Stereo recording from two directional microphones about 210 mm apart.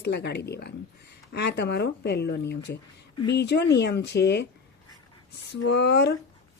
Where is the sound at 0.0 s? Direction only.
50° left (ahead or behind).